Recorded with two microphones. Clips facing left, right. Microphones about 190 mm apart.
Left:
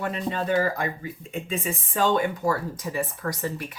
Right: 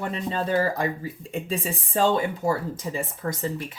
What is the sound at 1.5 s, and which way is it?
Speech, 30° right (ahead or behind).